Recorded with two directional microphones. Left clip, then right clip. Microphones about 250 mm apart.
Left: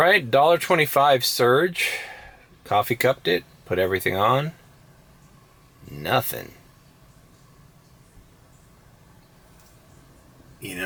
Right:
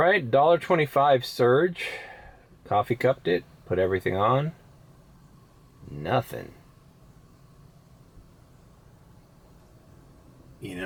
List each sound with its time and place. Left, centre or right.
0.0 s speech: centre
5.9 s speech: centre
10.6 s a man's voice: centre